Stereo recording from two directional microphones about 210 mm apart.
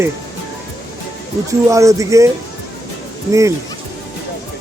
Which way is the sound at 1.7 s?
15° right (ahead or behind).